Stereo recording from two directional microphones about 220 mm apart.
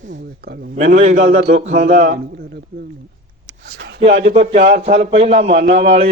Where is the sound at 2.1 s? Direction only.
45° right (ahead or behind).